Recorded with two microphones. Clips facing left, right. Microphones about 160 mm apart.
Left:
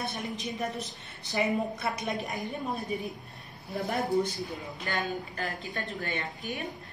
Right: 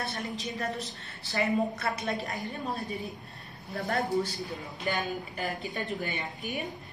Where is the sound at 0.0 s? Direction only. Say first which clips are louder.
Even; 20° left (ahead or behind).